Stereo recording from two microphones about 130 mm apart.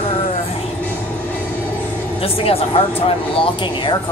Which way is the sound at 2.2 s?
50° left (ahead or behind).